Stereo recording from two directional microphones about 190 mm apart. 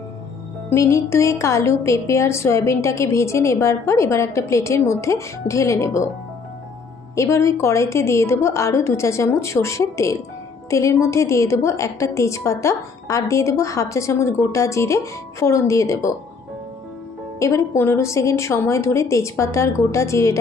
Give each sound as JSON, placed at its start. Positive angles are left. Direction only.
{"t": 0.7, "sound": "a woman's voice", "side_deg": 15}
{"t": 7.2, "sound": "a woman's voice", "side_deg": 15}
{"t": 17.4, "sound": "a woman's voice", "side_deg": 15}